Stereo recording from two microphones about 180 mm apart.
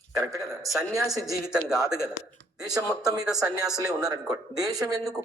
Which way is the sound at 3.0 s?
20° right (ahead or behind).